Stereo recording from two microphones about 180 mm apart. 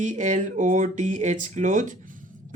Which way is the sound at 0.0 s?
40° right (ahead or behind).